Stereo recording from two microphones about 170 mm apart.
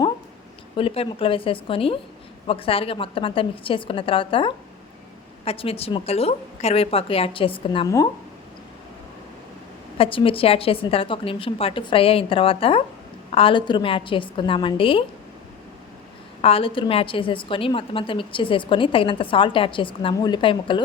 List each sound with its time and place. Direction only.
0.8 s a woman's voice: 30° left (ahead or behind)
10.0 s a woman's voice: 30° left (ahead or behind)
16.4 s a woman's voice: 35° left (ahead or behind)